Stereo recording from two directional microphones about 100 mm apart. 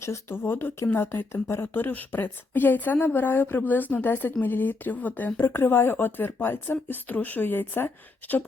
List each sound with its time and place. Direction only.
0.0 s speech: 25° left (ahead or behind)